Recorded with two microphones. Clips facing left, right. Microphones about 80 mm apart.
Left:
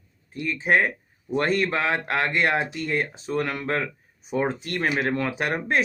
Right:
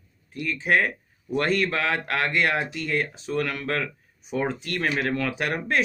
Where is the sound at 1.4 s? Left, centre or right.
Left.